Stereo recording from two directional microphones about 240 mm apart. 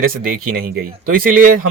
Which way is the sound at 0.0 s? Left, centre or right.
Right.